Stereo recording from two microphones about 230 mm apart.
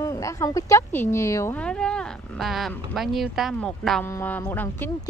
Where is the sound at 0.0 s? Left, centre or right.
Centre.